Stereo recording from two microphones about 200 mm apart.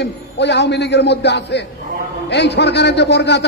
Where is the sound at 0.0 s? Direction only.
60° left (ahead or behind).